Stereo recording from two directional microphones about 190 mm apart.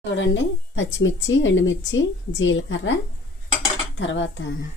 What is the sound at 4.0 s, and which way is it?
Dishes, 75° left (ahead or behind).